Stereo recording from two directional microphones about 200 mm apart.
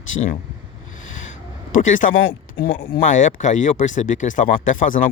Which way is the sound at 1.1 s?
35° left (ahead or behind).